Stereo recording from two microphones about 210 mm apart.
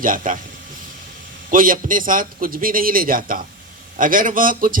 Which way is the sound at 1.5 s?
40° right (ahead or behind).